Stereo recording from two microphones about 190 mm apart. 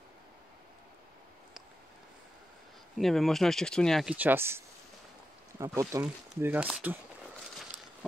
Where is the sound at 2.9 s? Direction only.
Centre (ahead or behind).